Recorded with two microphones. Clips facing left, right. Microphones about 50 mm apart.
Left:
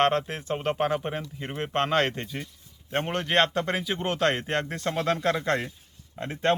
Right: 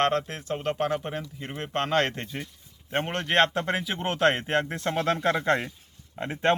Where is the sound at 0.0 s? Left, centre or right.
Centre.